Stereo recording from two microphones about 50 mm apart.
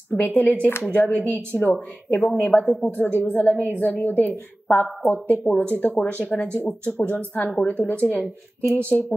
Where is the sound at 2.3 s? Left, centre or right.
Left.